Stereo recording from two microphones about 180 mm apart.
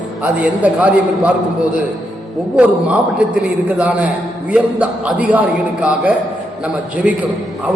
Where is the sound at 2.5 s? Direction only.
5° right (ahead or behind).